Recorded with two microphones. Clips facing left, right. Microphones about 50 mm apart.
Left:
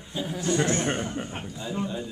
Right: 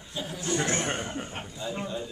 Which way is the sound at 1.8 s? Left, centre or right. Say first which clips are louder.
Left 2 dB; centre.